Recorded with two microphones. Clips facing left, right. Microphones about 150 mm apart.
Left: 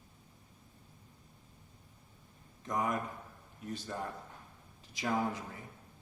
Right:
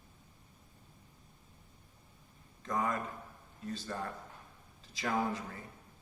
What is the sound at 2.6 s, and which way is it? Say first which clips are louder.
A man's voice: even; 20° left (ahead or behind).